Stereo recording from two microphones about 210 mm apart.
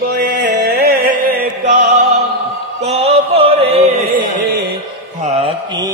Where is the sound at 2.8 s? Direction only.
30° right (ahead or behind).